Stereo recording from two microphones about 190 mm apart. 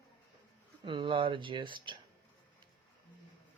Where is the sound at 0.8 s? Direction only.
25° right (ahead or behind).